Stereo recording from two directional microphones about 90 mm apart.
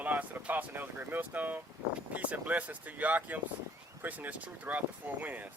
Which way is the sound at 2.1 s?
15° right (ahead or behind).